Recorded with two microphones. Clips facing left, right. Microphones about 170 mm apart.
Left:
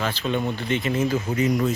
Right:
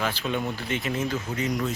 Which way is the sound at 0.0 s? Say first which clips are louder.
Left 3 dB; 10° right (ahead or behind).